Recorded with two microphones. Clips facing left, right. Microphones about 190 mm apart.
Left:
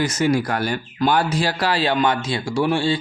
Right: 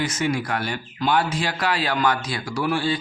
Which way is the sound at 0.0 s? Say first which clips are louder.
Left 5 dB; 40° left (ahead or behind).